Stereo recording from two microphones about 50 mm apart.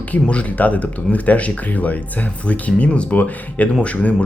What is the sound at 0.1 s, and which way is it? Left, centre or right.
Speech, left.